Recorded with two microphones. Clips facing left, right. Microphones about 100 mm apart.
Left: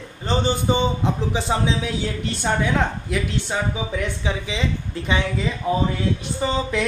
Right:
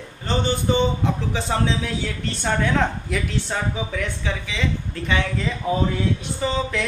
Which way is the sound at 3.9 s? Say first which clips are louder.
Left 2 dB; 20° left (ahead or behind).